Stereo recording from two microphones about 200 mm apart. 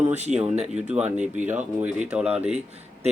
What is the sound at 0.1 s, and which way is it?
Speech, 35° right (ahead or behind).